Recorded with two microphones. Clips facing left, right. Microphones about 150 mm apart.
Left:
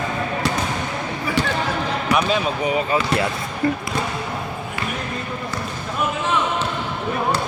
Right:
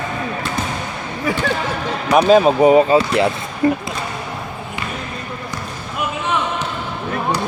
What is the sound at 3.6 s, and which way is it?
Speech, 25° right (ahead or behind).